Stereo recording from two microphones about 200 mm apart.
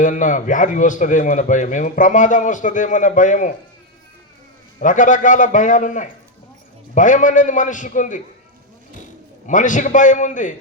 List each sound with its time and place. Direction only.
0.0 s a man's voice: 40° left (ahead or behind)
4.8 s a man's voice: 40° left (ahead or behind)
9.5 s a man's voice: 40° left (ahead or behind)